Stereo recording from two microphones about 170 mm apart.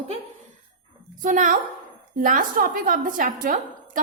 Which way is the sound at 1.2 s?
50° right (ahead or behind).